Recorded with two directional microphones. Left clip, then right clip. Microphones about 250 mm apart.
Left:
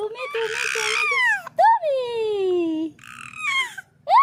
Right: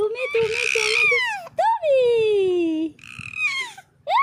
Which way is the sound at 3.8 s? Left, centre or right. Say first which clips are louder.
Left 4 dB; right.